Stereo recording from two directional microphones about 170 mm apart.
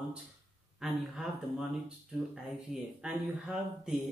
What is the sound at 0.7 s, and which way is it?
Speech, 5° right (ahead or behind).